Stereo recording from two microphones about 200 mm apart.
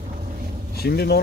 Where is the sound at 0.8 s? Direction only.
55° left (ahead or behind).